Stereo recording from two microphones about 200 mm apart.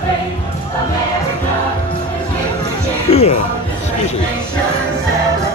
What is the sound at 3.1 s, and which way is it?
Speech, 30° left (ahead or behind).